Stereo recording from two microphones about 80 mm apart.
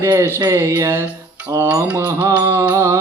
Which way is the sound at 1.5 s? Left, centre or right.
Right.